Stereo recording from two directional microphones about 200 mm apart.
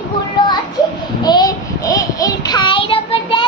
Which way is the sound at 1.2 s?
20° left (ahead or behind).